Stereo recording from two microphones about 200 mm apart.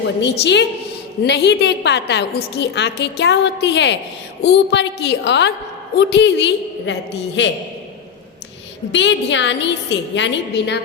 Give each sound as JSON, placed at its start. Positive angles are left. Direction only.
{"t": 0.2, "sound": "a woman's voice", "side_deg": 60}
{"t": 8.9, "sound": "a woman's voice", "side_deg": 65}